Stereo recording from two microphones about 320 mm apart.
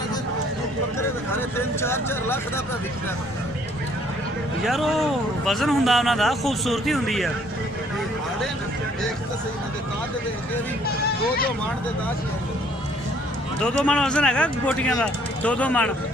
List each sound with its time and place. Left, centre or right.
1.3 s speech: centre
4.6 s speech: centre
10.8 s speech: left
13.8 s speech: centre